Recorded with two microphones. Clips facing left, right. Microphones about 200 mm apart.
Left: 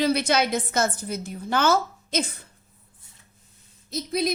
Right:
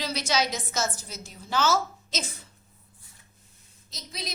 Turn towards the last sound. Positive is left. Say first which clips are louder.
# left 15 dB
turn(degrees=55)  # may be behind; listen again after turning